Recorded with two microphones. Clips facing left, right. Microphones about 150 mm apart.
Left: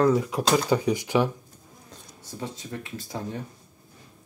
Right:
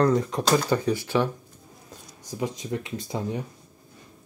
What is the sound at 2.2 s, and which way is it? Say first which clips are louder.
Speech: right 6 dB; 15° right (ahead or behind).